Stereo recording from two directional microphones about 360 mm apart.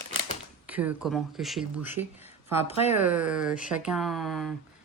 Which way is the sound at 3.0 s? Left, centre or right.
Centre.